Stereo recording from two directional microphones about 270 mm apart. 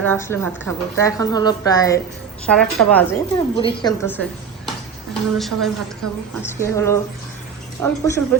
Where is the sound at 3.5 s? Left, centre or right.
Centre.